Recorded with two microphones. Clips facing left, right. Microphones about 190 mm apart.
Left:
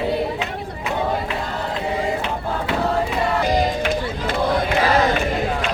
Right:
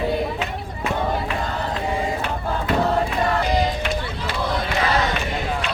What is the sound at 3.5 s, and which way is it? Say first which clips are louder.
Crowd: left 2 dB; 50° left (ahead or behind).